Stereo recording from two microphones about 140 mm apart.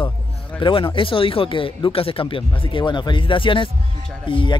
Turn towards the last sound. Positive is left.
turn(degrees=35)  # may be behind; listen again after turning